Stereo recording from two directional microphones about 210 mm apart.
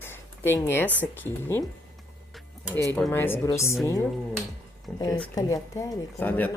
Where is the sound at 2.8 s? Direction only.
5° left (ahead or behind).